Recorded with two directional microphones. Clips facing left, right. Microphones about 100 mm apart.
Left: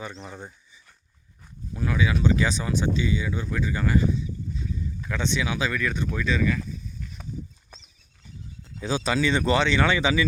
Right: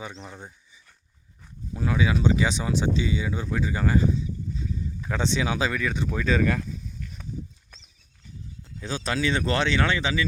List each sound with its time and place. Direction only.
0.1 s speech: centre (ahead or behind)
1.7 s speech: 25° right (ahead or behind)
5.7 s speech: 20° right (ahead or behind)
8.8 s speech: 10° left (ahead or behind)
9.1 s speech: centre (ahead or behind)